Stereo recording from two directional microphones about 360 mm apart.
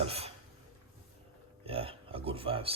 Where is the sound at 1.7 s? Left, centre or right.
Centre.